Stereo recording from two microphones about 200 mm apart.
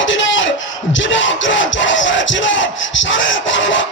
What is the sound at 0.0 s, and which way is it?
Music, 70° left (ahead or behind).